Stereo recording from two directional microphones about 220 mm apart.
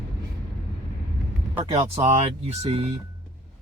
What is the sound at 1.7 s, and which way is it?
Speech, 30° right (ahead or behind).